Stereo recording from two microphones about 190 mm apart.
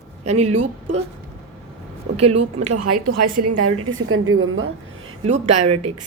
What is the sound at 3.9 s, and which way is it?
Speech, 90° right.